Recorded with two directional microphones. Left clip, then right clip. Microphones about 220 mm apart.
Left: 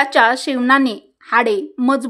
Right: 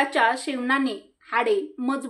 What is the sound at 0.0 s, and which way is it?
A woman's voice, 50° left (ahead or behind).